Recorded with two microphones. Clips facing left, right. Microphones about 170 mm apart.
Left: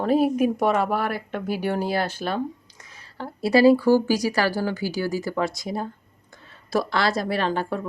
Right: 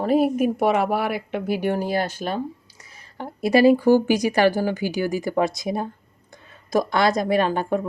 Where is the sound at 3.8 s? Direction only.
20° right (ahead or behind).